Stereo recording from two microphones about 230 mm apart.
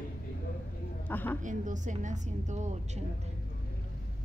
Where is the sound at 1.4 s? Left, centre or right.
Right.